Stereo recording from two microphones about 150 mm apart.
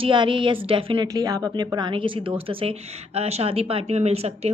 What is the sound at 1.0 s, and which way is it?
A woman's voice, 25° right (ahead or behind).